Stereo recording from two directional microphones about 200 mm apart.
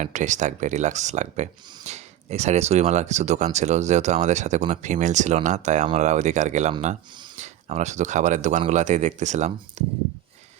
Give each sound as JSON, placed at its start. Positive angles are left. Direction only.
{"t": 0.0, "sound": "speech", "side_deg": -35}